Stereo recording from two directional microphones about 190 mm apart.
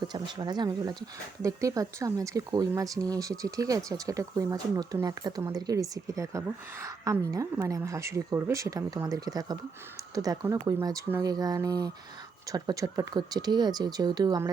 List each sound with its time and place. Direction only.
0.1 s speech: 25° right (ahead or behind)